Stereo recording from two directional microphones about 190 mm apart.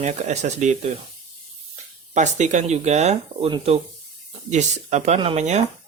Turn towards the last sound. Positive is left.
turn(degrees=-35)  # may be behind; listen again after turning